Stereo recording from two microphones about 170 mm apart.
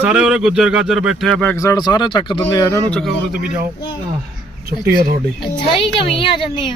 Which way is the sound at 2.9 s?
5° left (ahead or behind).